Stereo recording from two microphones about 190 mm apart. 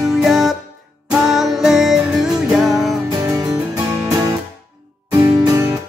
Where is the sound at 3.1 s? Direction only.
20° right (ahead or behind).